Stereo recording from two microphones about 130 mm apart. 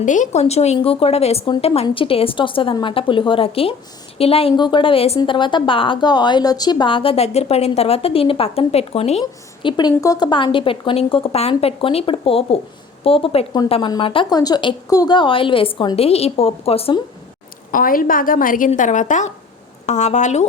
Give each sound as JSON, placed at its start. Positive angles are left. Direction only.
{"t": 0.0, "sound": "a woman's voice", "side_deg": 75}
{"t": 9.2, "sound": "a woman's voice", "side_deg": 35}
{"t": 17.7, "sound": "a woman's voice", "side_deg": 90}
{"t": 18.8, "sound": "a woman's voice", "side_deg": 70}